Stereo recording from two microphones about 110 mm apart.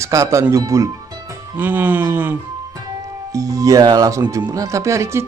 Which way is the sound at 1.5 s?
15° right (ahead or behind).